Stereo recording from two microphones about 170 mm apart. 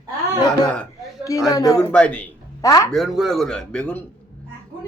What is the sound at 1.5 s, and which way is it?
Speech, 20° left (ahead or behind).